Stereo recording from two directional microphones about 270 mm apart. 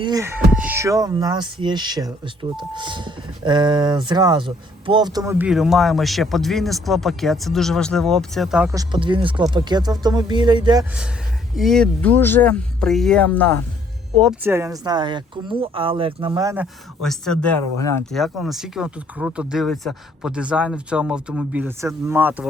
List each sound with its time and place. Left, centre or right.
0.0 s speech: centre
11.5 s speech: centre
14.2 s speech: centre
17.0 s speech: centre